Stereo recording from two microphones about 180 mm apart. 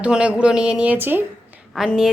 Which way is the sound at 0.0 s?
5° right (ahead or behind).